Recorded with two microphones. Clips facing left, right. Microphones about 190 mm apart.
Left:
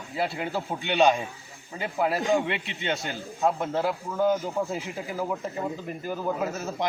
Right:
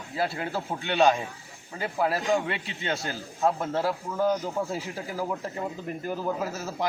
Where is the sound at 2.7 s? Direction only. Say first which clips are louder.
Left 1 dB; 20° left (ahead or behind).